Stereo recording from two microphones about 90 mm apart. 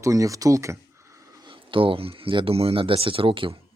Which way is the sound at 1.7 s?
80° right.